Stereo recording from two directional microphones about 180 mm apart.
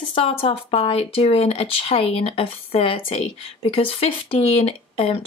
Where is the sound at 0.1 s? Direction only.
30° left (ahead or behind).